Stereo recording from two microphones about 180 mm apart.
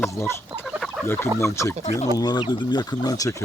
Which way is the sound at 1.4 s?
15° left (ahead or behind).